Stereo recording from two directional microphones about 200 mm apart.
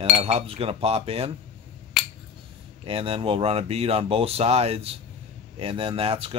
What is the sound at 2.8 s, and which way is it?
Cutlery, 25° right (ahead or behind).